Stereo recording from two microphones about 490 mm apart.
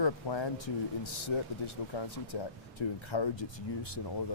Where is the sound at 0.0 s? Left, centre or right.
Left.